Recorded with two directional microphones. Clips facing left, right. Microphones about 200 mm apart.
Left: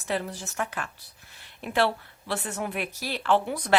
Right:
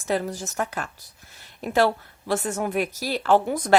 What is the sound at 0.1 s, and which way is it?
A woman's voice, 45° right (ahead or behind).